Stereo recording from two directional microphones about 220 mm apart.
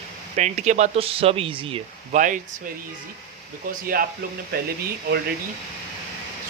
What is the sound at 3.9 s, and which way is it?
Speech, 40° right (ahead or behind).